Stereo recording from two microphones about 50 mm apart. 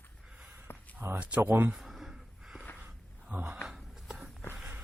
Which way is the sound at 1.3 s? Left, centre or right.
Right.